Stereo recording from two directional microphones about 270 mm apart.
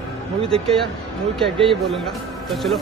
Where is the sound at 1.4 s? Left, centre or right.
Centre.